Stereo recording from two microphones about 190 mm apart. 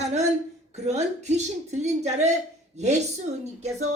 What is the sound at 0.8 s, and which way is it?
Speech, 35° right (ahead or behind).